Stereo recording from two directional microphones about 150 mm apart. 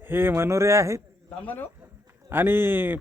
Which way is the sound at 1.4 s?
10° left (ahead or behind).